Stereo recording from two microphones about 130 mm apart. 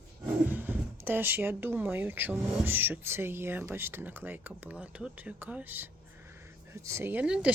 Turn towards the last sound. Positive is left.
turn(degrees=-5)  # may be behind; listen again after turning